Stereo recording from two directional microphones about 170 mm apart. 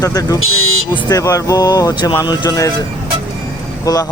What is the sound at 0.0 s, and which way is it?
Speech, 20° left (ahead or behind).